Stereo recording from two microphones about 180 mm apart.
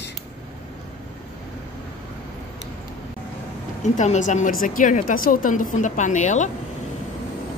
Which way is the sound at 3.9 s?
40° left (ahead or behind).